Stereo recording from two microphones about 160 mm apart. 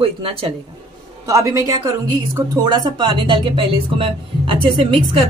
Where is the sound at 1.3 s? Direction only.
20° right (ahead or behind).